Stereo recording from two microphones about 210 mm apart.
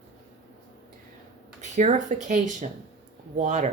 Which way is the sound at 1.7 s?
35° right (ahead or behind).